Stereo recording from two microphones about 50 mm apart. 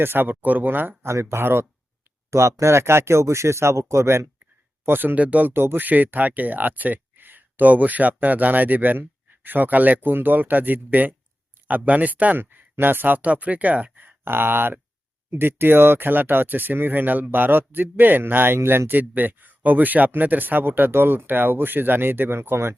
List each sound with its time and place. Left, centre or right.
0.0 s speech: right
1.0 s speech: right
2.3 s speech: right
4.9 s speech: right
5.1 s speech: right
5.5 s speech: right
12.4 s speech: right
18.9 s speech: right